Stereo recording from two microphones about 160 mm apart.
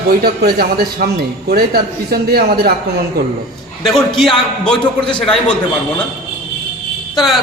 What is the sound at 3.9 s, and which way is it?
A man's voice, centre (ahead or behind).